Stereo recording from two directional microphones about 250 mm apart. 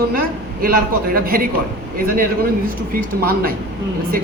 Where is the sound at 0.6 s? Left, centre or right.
Right.